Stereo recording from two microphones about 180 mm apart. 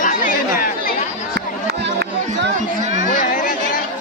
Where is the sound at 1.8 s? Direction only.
70° right (ahead or behind).